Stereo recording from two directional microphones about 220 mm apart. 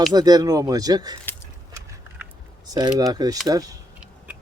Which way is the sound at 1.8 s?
15° right (ahead or behind).